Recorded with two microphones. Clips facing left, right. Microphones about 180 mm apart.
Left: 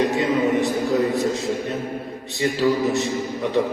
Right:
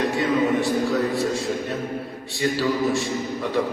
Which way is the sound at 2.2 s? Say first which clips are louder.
Left 3 dB; 20° left (ahead or behind).